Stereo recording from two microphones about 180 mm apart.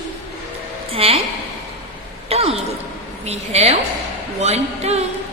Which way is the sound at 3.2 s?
35° right (ahead or behind).